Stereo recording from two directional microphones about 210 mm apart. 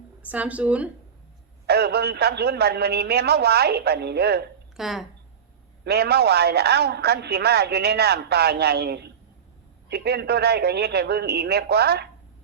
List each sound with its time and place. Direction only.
0.2 s speech: 5° right (ahead or behind)
1.6 s a woman's voice: 50° right (ahead or behind)
4.8 s speech: centre (ahead or behind)
5.8 s a woman's voice: 50° right (ahead or behind)